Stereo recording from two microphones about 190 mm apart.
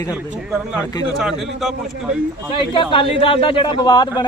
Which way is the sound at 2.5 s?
25° left (ahead or behind).